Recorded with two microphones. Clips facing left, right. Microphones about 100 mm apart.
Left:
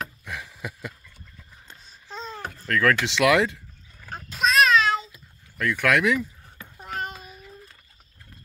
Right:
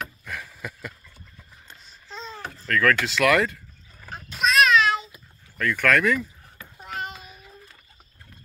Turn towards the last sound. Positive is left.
turn(degrees=35)  # may be behind; listen again after turning